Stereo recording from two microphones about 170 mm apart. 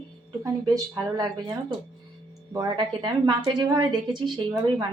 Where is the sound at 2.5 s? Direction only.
20° right (ahead or behind).